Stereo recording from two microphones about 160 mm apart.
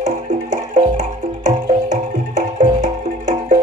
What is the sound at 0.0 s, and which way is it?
Music, 50° right (ahead or behind).